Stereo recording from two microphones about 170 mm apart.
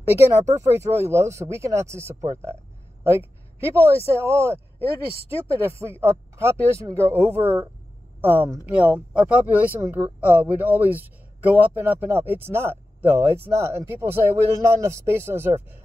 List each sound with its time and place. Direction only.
0.5 s speech: 15° right (ahead or behind)
3.0 s a sound: 15° right (ahead or behind)
3.6 s speech: 15° right (ahead or behind)